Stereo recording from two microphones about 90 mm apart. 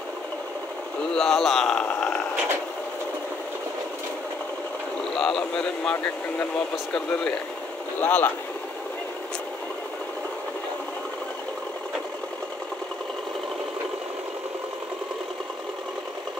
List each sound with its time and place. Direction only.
1.1 s a man's voice: centre (ahead or behind)
5.2 s speech: 5° left (ahead or behind)